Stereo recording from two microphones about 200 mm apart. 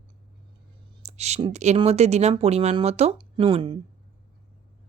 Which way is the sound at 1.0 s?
35° right (ahead or behind).